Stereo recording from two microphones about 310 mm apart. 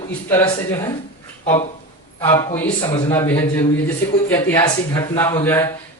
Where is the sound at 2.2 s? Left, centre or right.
Centre.